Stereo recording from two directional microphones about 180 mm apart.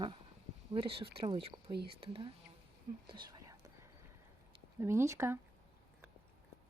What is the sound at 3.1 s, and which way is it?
Whispering, 25° right (ahead or behind).